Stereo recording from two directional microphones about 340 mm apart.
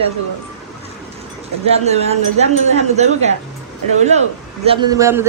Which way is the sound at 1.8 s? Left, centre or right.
Centre.